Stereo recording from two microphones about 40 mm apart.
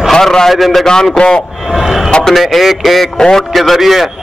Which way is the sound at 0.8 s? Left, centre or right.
Centre.